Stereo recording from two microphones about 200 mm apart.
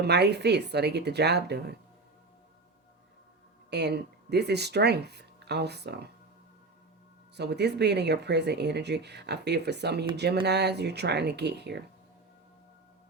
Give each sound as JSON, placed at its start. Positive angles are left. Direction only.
{"t": 0.0, "sound": "speech", "side_deg": -55}
{"t": 3.7, "sound": "speech", "side_deg": -55}
{"t": 7.3, "sound": "speech", "side_deg": -55}